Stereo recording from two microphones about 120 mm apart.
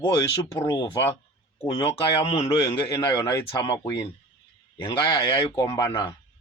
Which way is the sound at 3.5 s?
45° left (ahead or behind).